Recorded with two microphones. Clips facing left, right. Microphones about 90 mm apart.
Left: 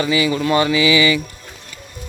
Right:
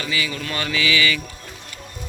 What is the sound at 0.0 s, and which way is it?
Speech, 20° left (ahead or behind).